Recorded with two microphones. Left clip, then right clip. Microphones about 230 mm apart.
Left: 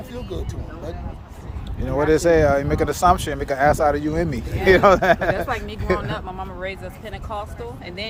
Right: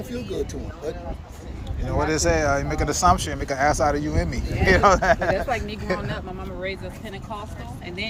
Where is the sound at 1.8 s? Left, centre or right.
Left.